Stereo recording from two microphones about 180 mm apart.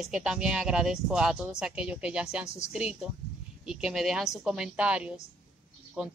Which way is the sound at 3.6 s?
5° right (ahead or behind).